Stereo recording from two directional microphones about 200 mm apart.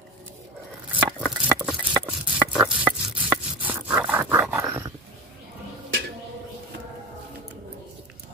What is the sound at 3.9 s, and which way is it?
Dog, 5° right (ahead or behind).